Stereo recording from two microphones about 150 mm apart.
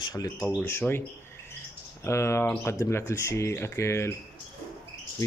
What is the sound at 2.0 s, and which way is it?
Speech, 20° left (ahead or behind).